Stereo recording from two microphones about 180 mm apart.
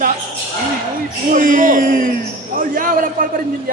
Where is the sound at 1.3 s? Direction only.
50° right (ahead or behind).